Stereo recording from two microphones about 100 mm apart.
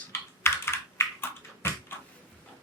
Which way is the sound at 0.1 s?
25° left (ahead or behind).